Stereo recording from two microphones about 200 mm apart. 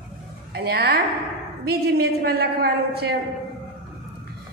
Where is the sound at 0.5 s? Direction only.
55° right (ahead or behind).